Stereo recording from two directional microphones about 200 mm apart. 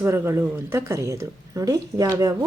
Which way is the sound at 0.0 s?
10° right (ahead or behind).